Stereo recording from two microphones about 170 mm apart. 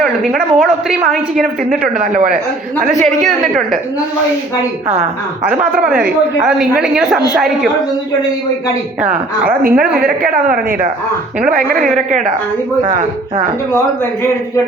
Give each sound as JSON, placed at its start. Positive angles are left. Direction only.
{"t": 0.6, "sound": "a woman's voice", "side_deg": -5}
{"t": 1.4, "sound": "speech", "side_deg": -55}
{"t": 5.9, "sound": "a woman's voice", "side_deg": -5}
{"t": 9.5, "sound": "a woman's voice", "side_deg": -60}
{"t": 13.7, "sound": "a man's voice", "side_deg": 15}